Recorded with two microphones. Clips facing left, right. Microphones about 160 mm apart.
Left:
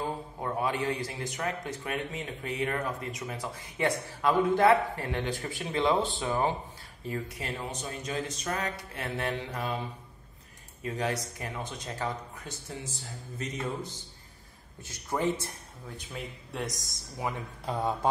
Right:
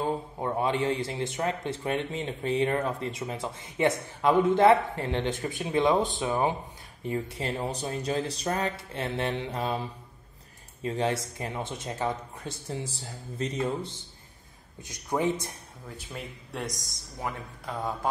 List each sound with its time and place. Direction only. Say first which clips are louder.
0.0 s a man's voice: right 4 dB; 25° right (ahead or behind)
14.8 s speech: right 3 dB; 15° right (ahead or behind)
15.9 s speech: even; centre (ahead or behind)